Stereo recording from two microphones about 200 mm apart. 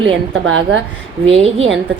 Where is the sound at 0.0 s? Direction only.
70° right (ahead or behind).